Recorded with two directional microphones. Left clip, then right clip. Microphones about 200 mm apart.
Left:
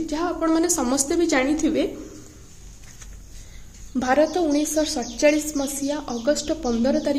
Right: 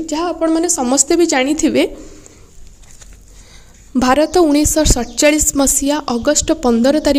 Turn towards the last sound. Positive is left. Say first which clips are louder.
# right 9 dB
turn(degrees=-50)  # may be behind; listen again after turning